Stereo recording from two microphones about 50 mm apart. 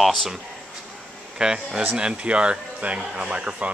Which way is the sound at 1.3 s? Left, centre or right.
Centre.